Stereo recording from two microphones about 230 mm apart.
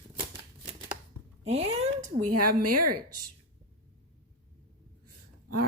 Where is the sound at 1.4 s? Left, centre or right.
Right.